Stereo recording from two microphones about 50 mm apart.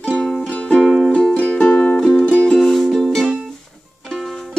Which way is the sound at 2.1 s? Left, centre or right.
Left.